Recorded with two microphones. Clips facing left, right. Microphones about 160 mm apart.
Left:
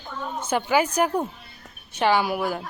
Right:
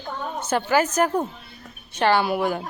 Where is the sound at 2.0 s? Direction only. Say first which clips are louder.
Right 1 dB; 10° left (ahead or behind).